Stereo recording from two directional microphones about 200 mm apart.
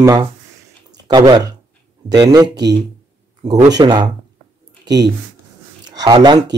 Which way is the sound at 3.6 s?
20° right (ahead or behind).